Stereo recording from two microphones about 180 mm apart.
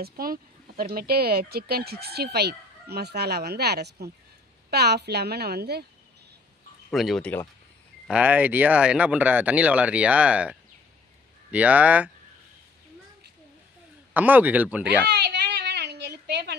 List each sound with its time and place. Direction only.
0.0 s speech: 55° right (ahead or behind)
6.9 s speech: centre (ahead or behind)
8.1 s speech: 10° right (ahead or behind)
14.1 s speech: 10° right (ahead or behind)
15.0 s a sound: 70° right (ahead or behind)